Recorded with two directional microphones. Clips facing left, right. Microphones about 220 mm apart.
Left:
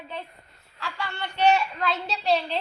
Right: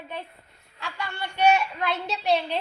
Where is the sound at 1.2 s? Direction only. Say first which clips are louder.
Even; 10° right (ahead or behind).